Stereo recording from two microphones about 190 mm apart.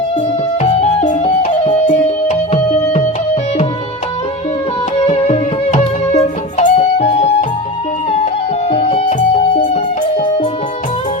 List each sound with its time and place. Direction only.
0.6 s music: 35° left (ahead or behind)
5.0 s music: 30° left (ahead or behind)
8.7 s music: 35° left (ahead or behind)